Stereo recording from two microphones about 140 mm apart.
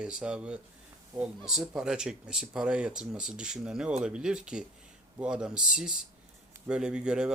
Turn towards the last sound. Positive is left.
turn(degrees=-5)  # may be behind; listen again after turning